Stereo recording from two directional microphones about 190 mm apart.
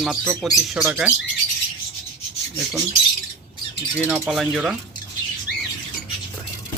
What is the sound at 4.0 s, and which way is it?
Speech, 5° right (ahead or behind).